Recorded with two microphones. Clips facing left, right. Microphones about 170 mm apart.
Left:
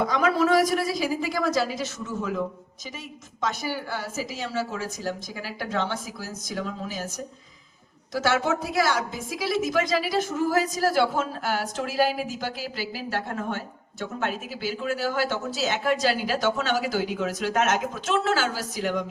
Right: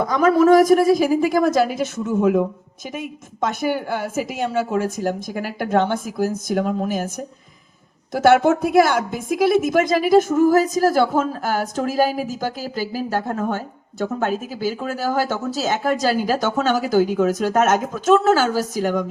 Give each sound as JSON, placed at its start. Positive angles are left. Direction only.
{"t": 0.0, "sound": "a woman's voice", "side_deg": -45}
{"t": 8.1, "sound": "a woman's voice", "side_deg": -55}